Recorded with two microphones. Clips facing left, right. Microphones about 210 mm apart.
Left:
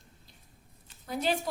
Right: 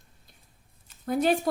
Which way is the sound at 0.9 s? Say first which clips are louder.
Right 7 dB; 50° right (ahead or behind).